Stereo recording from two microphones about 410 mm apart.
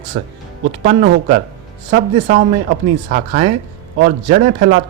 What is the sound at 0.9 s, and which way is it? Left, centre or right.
Speech, centre.